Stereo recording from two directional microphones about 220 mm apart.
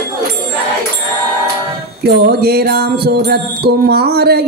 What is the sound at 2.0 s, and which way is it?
Music, 45° right (ahead or behind).